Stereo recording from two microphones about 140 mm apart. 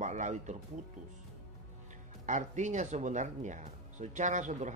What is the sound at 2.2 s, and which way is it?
Speech, 60° right (ahead or behind).